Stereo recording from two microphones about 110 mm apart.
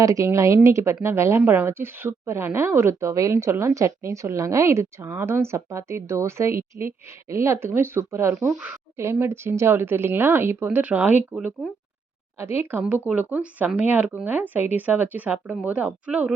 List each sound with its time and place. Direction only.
0.0 s speech: 30° right (ahead or behind)
11.3 s speech: 5° right (ahead or behind)
12.4 s speech: 20° right (ahead or behind)